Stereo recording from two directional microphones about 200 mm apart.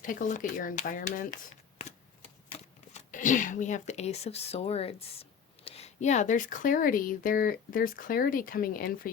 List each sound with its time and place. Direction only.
0.0 s speech: 40° left (ahead or behind)
2.5 s speech: 35° left (ahead or behind)